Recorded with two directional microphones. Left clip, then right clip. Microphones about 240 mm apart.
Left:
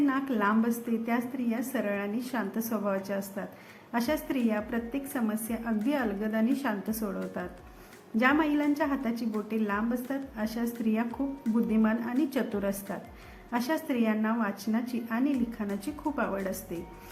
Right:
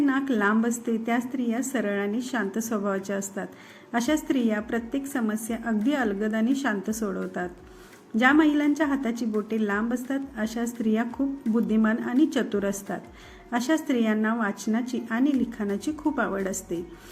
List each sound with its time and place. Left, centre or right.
0.0 s a woman's voice: centre